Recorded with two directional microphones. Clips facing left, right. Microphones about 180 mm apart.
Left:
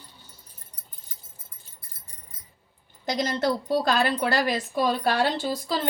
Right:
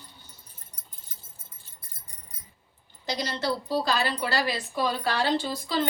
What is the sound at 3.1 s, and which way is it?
Speech, 50° left (ahead or behind).